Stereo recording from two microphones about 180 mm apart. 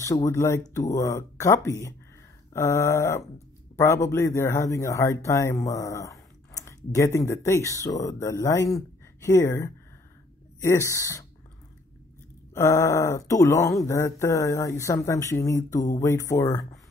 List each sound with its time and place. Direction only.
0.0 s speech: 20° left (ahead or behind)
12.5 s speech: 15° left (ahead or behind)